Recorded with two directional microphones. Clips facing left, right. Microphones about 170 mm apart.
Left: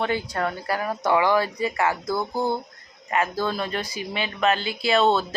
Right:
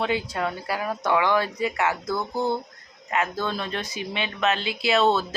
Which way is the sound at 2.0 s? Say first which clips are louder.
Left 1 dB; 10° left (ahead or behind).